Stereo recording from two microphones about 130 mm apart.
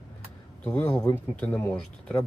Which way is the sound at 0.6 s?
10° left (ahead or behind).